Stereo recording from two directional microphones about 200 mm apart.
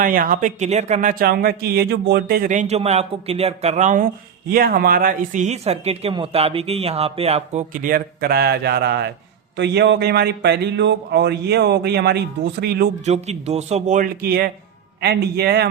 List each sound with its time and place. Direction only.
0.0 s speech: 45° right (ahead or behind)
13.1 s a man's voice: 35° right (ahead or behind); by 15.7 s 55° right (ahead or behind)